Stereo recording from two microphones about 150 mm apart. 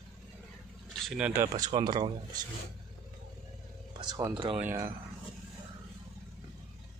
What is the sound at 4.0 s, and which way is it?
Speech, 25° right (ahead or behind).